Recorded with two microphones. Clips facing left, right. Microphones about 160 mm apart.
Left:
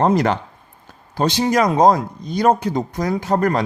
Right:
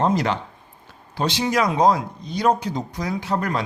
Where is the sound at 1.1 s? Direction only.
45° left (ahead or behind).